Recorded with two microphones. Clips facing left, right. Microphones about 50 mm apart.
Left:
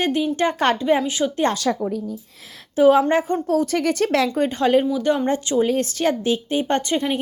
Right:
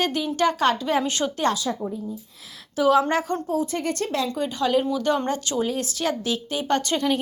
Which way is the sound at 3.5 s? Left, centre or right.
Left.